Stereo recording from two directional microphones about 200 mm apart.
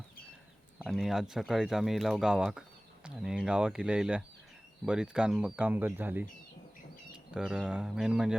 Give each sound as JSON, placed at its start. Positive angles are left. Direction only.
{"t": 0.8, "sound": "speech", "side_deg": 0}